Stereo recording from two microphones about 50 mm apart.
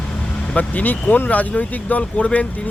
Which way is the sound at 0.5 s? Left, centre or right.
Left.